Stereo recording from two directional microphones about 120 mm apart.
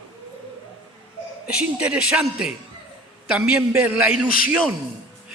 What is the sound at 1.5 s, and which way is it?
A man's voice, 10° right (ahead or behind).